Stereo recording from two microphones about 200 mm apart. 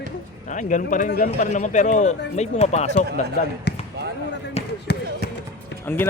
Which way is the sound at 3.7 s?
55° left (ahead or behind).